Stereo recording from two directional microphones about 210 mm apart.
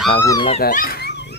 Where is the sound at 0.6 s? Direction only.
45° left (ahead or behind).